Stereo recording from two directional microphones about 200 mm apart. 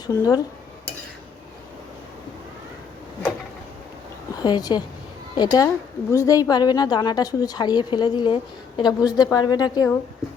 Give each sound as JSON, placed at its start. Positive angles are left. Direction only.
{"t": 0.1, "sound": "speech", "side_deg": 20}
{"t": 4.4, "sound": "a woman's voice", "side_deg": 20}